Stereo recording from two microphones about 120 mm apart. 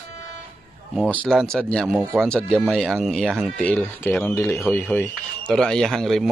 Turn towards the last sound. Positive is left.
turn(degrees=0)  # may be behind; listen again after turning